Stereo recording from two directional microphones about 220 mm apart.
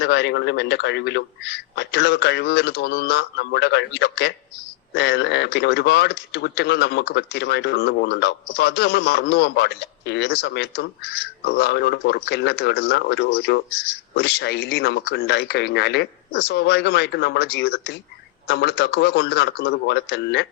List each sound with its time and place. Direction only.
0.0 s speech: 50° left (ahead or behind)